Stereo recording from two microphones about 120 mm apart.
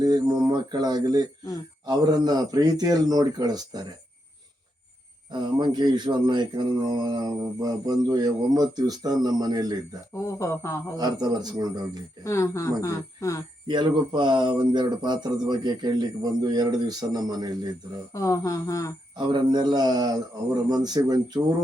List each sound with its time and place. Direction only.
0.0 s speech: 35° right (ahead or behind)
5.3 s speech: 40° right (ahead or behind)
10.2 s speech: 25° left (ahead or behind)
10.9 s speech: 35° right (ahead or behind)
12.2 s speech: 25° left (ahead or behind)
13.7 s speech: 40° right (ahead or behind)
18.1 s speech: 25° left (ahead or behind)
19.1 s speech: 40° right (ahead or behind)